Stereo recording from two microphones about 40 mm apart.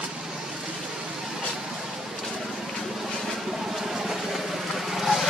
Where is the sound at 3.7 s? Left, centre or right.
Centre.